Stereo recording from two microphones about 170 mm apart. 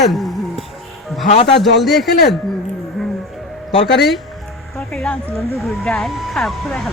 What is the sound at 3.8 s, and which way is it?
Speech, 80° left.